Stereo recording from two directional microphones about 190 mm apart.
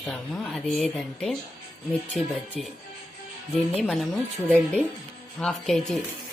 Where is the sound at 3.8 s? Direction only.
Centre (ahead or behind).